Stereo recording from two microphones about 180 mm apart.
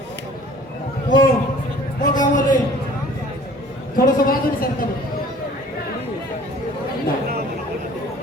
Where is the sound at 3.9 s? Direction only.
55° left (ahead or behind).